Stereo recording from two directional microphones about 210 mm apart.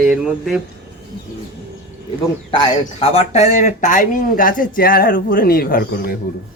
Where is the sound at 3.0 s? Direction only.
30° left (ahead or behind).